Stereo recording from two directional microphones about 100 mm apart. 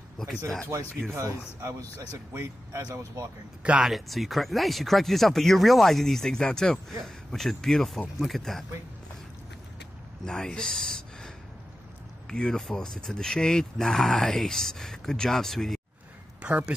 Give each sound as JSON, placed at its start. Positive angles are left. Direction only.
{"t": 0.2, "sound": "speech", "side_deg": 5}
{"t": 1.1, "sound": "speech", "side_deg": -35}
{"t": 3.6, "sound": "speech", "side_deg": -10}
{"t": 3.9, "sound": "speech", "side_deg": 0}
{"t": 10.2, "sound": "speech", "side_deg": 5}
{"t": 16.4, "sound": "speech", "side_deg": -10}